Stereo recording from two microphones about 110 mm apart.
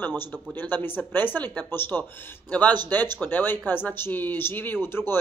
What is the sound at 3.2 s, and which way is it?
Speech, 20° left (ahead or behind).